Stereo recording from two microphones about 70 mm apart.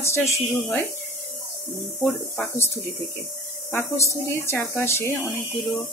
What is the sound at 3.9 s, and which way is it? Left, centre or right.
Speech, left.